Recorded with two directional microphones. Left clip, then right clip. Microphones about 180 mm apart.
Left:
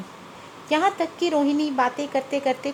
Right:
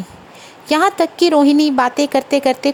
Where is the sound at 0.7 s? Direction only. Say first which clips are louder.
Right 8 dB; 50° right (ahead or behind).